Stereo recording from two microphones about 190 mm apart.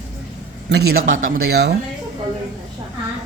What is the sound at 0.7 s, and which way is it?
Speech, 60° right (ahead or behind).